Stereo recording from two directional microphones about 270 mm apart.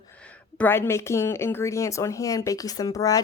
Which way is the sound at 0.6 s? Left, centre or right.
Centre.